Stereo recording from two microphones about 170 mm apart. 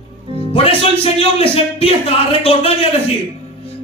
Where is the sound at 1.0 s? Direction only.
30° left (ahead or behind).